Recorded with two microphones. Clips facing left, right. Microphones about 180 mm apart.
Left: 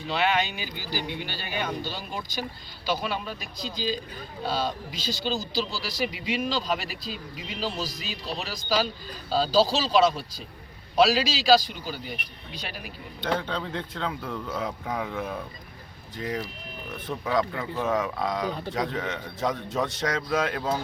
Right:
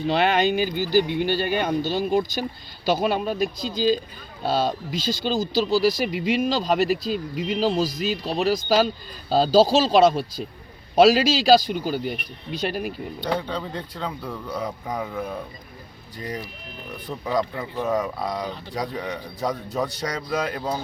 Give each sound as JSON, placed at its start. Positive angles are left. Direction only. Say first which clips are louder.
{"t": 0.1, "sound": "speech", "louder": "right 5 dB", "side_deg": -50}
{"t": 13.2, "sound": "a man's voice", "louder": "right 1 dB", "side_deg": 0}
{"t": 17.1, "sound": "speech", "louder": "even", "side_deg": -20}
{"t": 17.8, "sound": "a man's voice", "louder": "right 2 dB", "side_deg": 0}